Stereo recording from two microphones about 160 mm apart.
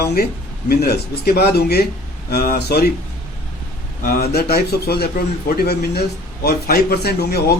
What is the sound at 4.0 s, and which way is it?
Speech, 70° left (ahead or behind).